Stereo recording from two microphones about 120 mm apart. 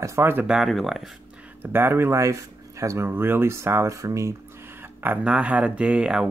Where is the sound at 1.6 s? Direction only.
20° right (ahead or behind).